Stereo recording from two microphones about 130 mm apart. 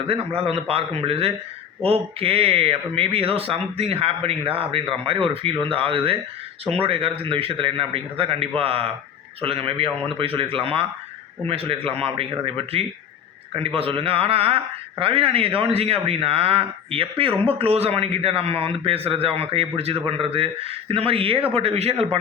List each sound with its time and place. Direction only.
0.1 s a man's voice: 45° right (ahead or behind)